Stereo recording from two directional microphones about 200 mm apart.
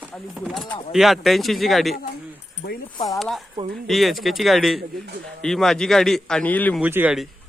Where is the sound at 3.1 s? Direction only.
Centre (ahead or behind).